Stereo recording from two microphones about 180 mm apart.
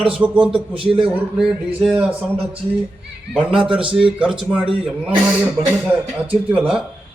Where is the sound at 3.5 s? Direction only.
30° right (ahead or behind).